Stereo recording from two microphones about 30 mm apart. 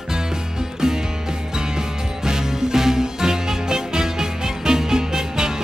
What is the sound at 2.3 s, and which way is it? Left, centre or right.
Music, centre.